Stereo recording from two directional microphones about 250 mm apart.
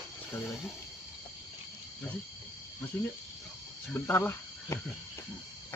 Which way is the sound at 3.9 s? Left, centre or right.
Centre.